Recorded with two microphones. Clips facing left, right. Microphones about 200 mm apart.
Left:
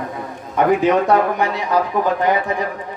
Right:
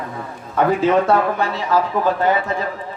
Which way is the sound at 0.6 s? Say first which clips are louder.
Left 1 dB; 15° left (ahead or behind).